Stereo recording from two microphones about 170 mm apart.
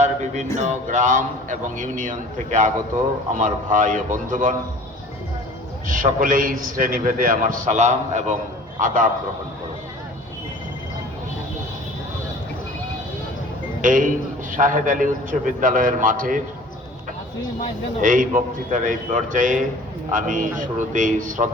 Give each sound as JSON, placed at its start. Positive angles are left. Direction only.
{"t": 0.0, "sound": "a sound", "side_deg": -45}
{"t": 0.5, "sound": "a man's voice", "side_deg": -45}
{"t": 5.9, "sound": "a man's voice", "side_deg": -55}
{"t": 13.8, "sound": "a man's voice", "side_deg": -50}
{"t": 18.0, "sound": "a man's voice", "side_deg": -50}